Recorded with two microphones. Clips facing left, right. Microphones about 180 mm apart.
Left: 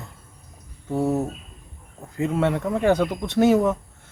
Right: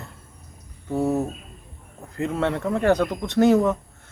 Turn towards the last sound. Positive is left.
turn(degrees=10)  # may be behind; listen again after turning